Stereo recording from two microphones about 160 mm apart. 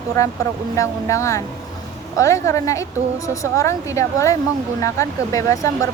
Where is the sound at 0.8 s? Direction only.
20° left (ahead or behind).